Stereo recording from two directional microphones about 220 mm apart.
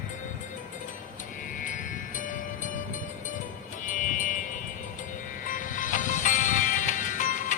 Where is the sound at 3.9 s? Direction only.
35° left (ahead or behind).